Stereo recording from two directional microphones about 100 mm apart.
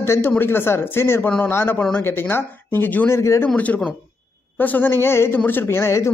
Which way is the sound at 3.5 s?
15° left (ahead or behind).